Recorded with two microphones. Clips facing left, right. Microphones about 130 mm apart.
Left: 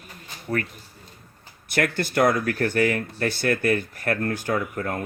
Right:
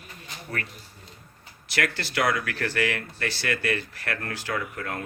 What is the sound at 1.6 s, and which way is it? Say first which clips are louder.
Speech: left 5 dB; 50° left (ahead or behind).